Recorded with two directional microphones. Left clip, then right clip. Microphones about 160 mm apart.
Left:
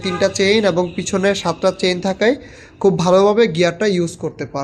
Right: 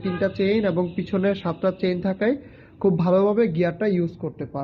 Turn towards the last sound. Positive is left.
turn(degrees=25)  # may be behind; listen again after turning